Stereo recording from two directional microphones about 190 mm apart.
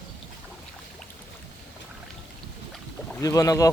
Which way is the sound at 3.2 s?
15° left (ahead or behind).